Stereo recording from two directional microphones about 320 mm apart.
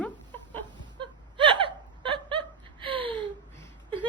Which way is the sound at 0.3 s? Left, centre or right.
Centre.